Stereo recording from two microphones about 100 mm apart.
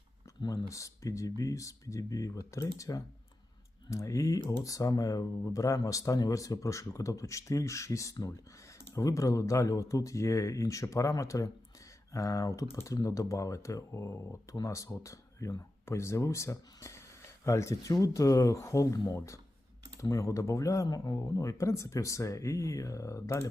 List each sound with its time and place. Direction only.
0.7 s speech: 30° left (ahead or behind)